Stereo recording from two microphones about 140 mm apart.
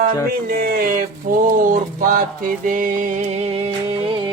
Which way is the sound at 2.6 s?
75° right (ahead or behind).